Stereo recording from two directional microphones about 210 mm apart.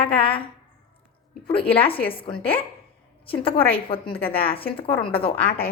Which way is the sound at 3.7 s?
25° left (ahead or behind).